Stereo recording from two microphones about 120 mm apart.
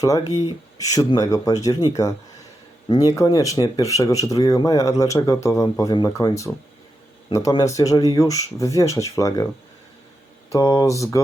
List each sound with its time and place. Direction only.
0.0 s speech: 30° left (ahead or behind)
7.6 s speech: 25° left (ahead or behind)
10.5 s speech: 30° left (ahead or behind)